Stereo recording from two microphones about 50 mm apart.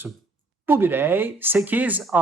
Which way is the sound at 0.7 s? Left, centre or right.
Right.